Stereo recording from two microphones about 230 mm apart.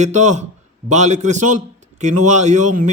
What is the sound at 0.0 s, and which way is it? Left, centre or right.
Speech, right.